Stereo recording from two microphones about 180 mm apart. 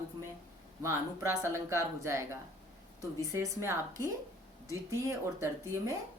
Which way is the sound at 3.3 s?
15° right (ahead or behind).